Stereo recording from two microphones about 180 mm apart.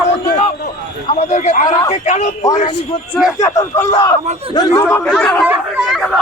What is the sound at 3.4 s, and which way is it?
A man's voice, 20° left (ahead or behind).